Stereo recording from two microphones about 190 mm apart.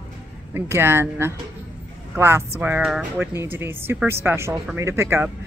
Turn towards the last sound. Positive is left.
turn(degrees=-15)  # may be behind; listen again after turning